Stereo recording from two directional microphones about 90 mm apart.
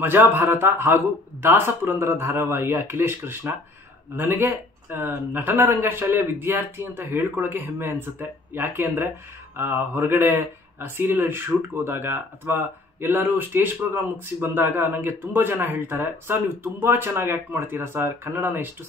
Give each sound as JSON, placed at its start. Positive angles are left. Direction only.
{"t": 0.0, "sound": "speech", "side_deg": -20}